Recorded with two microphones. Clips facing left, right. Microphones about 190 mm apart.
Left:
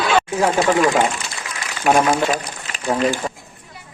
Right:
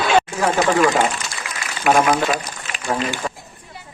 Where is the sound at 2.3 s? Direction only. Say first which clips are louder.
Even; 45° left (ahead or behind).